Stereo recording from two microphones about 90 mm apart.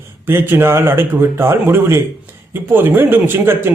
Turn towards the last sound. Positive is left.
turn(degrees=-25)  # may be behind; listen again after turning